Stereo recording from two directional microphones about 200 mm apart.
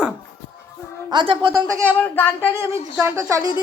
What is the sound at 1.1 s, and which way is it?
Speech, 25° right (ahead or behind).